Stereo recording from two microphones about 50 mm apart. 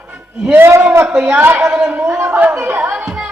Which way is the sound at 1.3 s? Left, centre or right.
Right.